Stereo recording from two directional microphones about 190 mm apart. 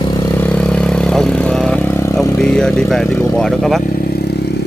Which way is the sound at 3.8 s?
50° left (ahead or behind).